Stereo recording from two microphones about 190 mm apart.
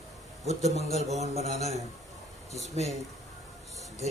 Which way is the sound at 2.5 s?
35° left (ahead or behind).